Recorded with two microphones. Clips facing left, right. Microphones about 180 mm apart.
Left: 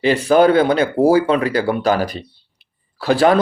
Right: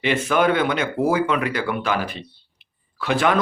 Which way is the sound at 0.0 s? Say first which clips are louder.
Left 7 dB; 35° left (ahead or behind).